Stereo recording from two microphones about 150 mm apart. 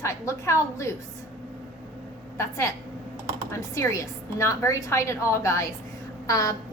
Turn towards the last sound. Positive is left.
turn(degrees=20)  # may be behind; listen again after turning